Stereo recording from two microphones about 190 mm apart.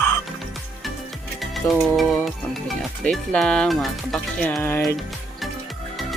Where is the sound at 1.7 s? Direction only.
Centre (ahead or behind).